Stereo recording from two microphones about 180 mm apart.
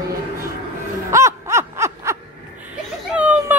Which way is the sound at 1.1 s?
15° right (ahead or behind).